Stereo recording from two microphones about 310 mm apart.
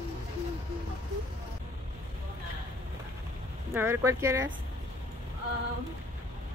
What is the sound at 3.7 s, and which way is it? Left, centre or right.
Speech, centre.